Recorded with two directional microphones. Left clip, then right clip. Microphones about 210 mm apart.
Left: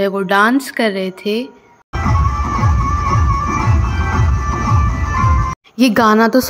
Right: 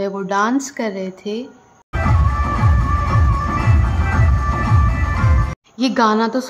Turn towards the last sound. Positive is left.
turn(degrees=20)  # may be behind; listen again after turning